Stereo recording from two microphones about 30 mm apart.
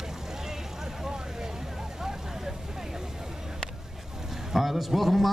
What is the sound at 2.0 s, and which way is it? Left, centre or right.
Vehicle, centre.